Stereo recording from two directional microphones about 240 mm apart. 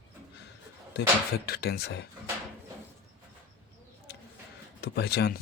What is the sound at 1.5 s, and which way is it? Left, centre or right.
Speech, left.